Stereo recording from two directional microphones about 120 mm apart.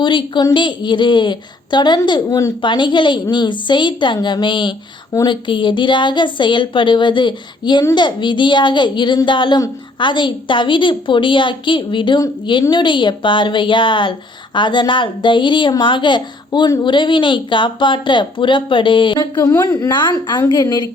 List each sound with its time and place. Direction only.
0.0 s a woman's voice: 40° left (ahead or behind)
19.9 s a woman's voice: 40° left (ahead or behind)